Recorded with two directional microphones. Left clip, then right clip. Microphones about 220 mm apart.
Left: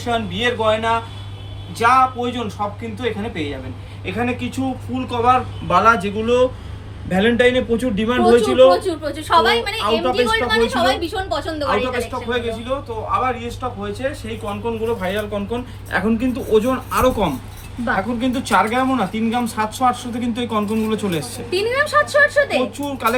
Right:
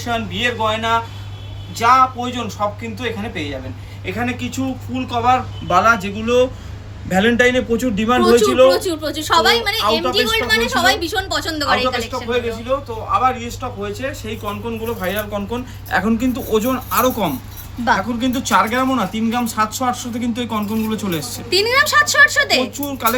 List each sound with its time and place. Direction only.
0.0 s a man's voice: centre (ahead or behind)
7.1 s a man's voice: 10° right (ahead or behind)
8.7 s a woman's voice: 30° right (ahead or behind)
11.9 s a man's voice: centre (ahead or behind)
21.5 s speech: 50° right (ahead or behind)
22.9 s speech: 10° left (ahead or behind)